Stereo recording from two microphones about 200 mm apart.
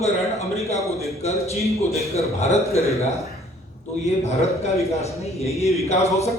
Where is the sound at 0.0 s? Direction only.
30° left (ahead or behind).